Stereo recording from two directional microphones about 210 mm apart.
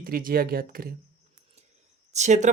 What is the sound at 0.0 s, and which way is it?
Speech, 45° right (ahead or behind).